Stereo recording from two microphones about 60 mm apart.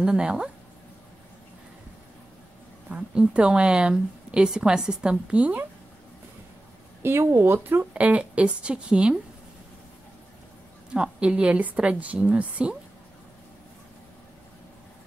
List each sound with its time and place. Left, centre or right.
0.0 s a woman's voice: centre
2.9 s a woman's voice: centre
7.0 s speech: right
7.9 s a woman's voice: right
10.9 s a woman's voice: centre